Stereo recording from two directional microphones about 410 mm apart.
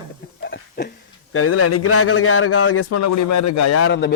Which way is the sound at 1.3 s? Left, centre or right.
Left.